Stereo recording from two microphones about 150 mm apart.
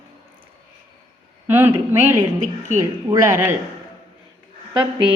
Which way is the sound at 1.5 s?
15° right (ahead or behind).